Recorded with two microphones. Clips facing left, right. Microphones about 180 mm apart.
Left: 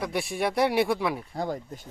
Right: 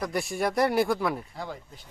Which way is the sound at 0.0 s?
Centre (ahead or behind).